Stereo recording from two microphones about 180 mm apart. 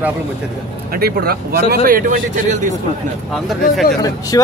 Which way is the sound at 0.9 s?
55° right (ahead or behind).